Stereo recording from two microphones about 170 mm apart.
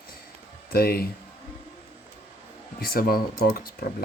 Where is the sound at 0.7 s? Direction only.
65° left (ahead or behind).